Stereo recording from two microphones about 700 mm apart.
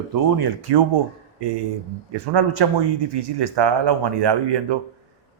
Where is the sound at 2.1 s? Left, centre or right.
Right.